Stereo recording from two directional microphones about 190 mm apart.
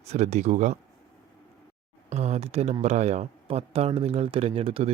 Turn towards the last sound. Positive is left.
turn(degrees=-30)  # may be behind; listen again after turning